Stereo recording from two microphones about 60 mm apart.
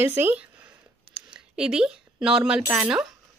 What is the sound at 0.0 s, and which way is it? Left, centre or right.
Speech, right.